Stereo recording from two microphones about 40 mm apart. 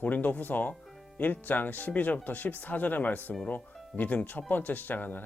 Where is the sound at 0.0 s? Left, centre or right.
Left.